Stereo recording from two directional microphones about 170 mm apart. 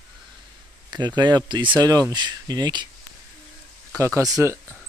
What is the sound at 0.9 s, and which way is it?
Speech, 25° right (ahead or behind).